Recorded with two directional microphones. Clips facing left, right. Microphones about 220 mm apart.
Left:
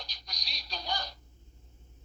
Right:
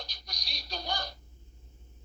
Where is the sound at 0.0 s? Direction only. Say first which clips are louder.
Right 2 dB; 50° right (ahead or behind).